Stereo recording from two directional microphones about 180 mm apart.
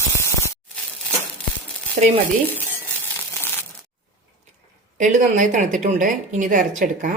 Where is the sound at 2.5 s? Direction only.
10° left (ahead or behind).